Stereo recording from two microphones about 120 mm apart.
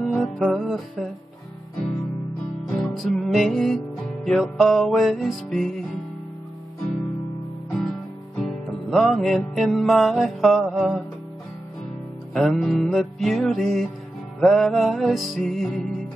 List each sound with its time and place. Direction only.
0.0 s music: 5° left (ahead or behind)
2.7 s music: centre (ahead or behind)
7.7 s music: 5° left (ahead or behind)
12.4 s music: centre (ahead or behind)